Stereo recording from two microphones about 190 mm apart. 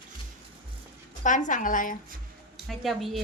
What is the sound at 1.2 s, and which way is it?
Speech, 40° left (ahead or behind).